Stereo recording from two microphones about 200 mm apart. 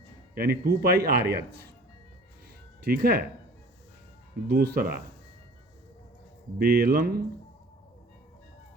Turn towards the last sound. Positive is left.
turn(degrees=-50)  # may be behind; listen again after turning